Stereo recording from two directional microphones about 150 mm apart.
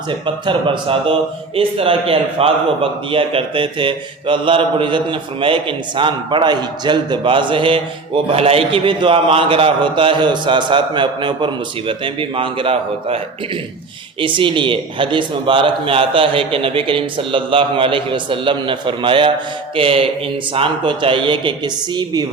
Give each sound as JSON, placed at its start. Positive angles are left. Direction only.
{"t": 0.3, "sound": "a man's voice", "side_deg": -30}